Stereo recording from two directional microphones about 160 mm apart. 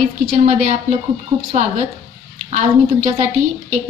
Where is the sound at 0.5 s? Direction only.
50° right (ahead or behind).